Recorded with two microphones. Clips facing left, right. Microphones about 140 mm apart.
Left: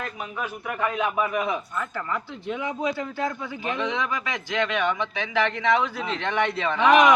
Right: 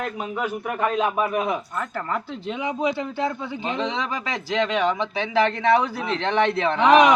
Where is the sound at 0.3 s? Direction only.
10° right (ahead or behind).